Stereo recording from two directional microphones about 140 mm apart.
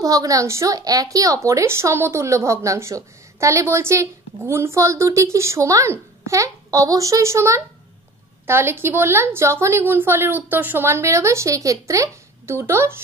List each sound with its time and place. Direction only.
0.0 s a woman's voice: 25° right (ahead or behind)